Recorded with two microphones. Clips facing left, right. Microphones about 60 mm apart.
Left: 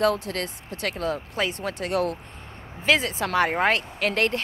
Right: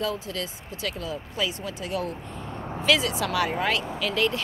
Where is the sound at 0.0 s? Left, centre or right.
Left.